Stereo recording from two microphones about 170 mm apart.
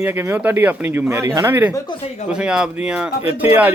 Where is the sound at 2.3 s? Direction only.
5° right (ahead or behind).